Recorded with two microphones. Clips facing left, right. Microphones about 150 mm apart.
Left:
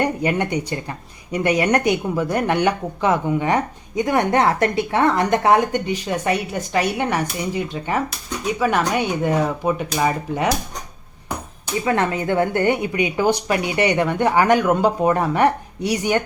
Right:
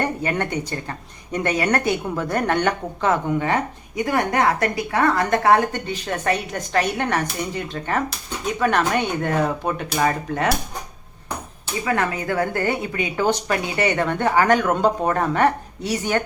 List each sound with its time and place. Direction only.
0.0 s speech: 15° left (ahead or behind)
11.9 s speech: 25° left (ahead or behind)